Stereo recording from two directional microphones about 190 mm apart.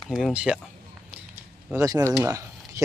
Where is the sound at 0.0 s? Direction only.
Centre (ahead or behind).